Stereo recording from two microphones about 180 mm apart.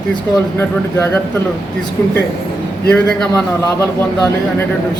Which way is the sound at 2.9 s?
5° left (ahead or behind).